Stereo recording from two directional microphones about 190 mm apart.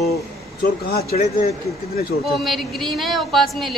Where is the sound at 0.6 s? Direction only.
55° left (ahead or behind).